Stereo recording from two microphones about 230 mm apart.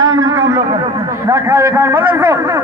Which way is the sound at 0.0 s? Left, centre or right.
Centre.